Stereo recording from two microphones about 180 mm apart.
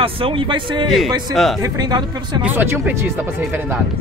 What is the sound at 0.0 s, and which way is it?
Speech, 30° right (ahead or behind).